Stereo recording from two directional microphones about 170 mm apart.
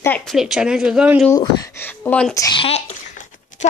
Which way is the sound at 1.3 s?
15° left (ahead or behind).